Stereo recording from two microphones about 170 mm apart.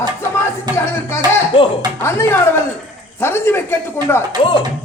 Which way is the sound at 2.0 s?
15° left (ahead or behind).